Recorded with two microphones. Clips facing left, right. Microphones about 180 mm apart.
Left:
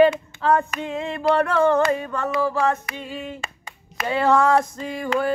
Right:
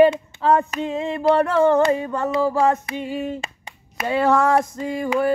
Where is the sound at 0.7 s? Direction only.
20° right (ahead or behind).